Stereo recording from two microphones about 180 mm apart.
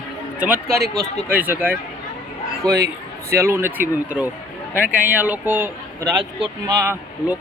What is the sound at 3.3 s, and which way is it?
Speech, 15° right (ahead or behind).